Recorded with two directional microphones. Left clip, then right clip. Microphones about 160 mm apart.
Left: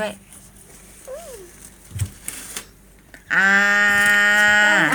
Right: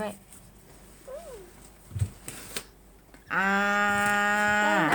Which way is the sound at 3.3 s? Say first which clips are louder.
Left 10 dB; centre (ahead or behind).